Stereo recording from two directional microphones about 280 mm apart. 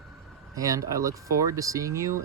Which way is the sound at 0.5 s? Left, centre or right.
Centre.